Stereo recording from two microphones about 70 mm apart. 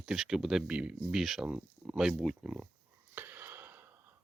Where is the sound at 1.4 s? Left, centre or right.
Right.